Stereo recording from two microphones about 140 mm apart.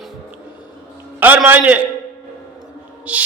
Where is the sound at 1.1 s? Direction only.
10° right (ahead or behind).